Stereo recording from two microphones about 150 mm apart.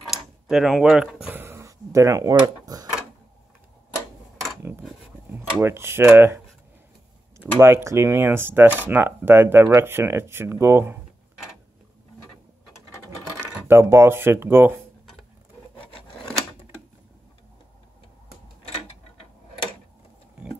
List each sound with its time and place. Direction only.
0.1 s a sound: centre (ahead or behind); by 2.9 s 25° right (ahead or behind)
5.3 s speech: 15° right (ahead or behind)
7.5 s speech: 20° right (ahead or behind)
13.7 s speech: 15° right (ahead or behind)